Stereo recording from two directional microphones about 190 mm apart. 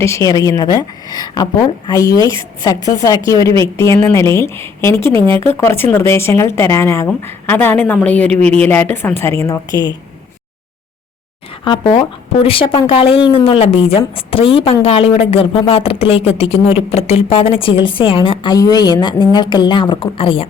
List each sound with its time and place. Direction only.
0.3 s a woman's voice: 20° left (ahead or behind)
11.6 s speech: 25° left (ahead or behind)